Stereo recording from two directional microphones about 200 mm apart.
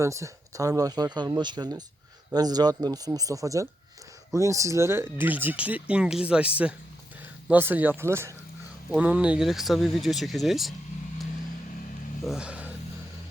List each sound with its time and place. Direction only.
0.0 s speech: 15° right (ahead or behind)
12.2 s speech: 5° right (ahead or behind)